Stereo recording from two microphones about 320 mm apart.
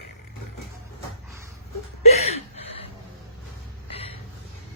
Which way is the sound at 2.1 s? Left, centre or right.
Centre.